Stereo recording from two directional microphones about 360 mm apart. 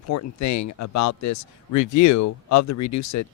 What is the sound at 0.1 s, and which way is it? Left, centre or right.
Speech, left.